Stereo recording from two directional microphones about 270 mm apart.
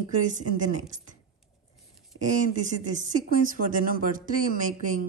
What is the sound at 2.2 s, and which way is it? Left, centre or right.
Speech, right.